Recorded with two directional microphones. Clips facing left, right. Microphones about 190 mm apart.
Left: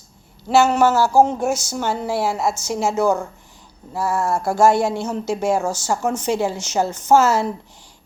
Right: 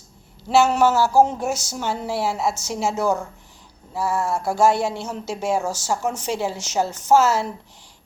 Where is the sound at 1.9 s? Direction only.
50° left (ahead or behind).